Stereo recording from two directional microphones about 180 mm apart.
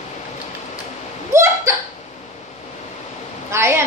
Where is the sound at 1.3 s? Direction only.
15° right (ahead or behind).